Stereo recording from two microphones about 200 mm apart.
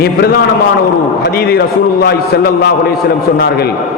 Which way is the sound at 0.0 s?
55° left (ahead or behind).